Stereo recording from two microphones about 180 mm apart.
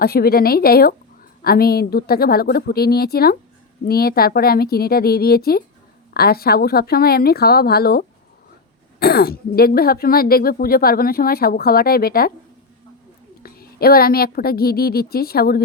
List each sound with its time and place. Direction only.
0.0 s speech: 55° left (ahead or behind)
13.4 s speech: 55° left (ahead or behind)